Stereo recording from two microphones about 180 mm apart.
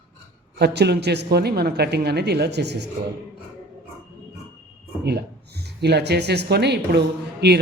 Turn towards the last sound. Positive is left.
turn(degrees=-65)  # may be behind; listen again after turning